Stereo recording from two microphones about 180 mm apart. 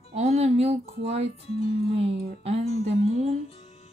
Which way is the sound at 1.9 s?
35° right (ahead or behind).